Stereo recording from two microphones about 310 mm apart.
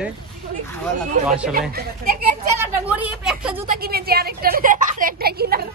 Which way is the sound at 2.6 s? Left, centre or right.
Centre.